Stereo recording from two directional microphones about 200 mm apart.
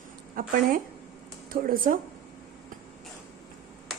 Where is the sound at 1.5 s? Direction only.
45° right (ahead or behind).